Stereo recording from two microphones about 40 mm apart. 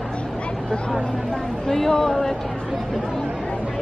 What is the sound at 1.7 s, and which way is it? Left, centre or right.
Speech, centre.